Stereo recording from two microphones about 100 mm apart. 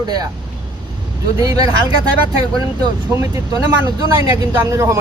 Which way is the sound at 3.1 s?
30° right (ahead or behind).